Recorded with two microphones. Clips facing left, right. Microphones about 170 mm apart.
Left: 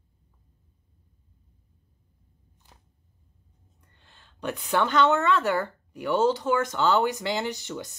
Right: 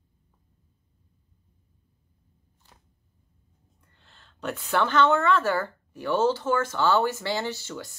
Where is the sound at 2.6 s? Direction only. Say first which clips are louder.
Even; 15° left (ahead or behind).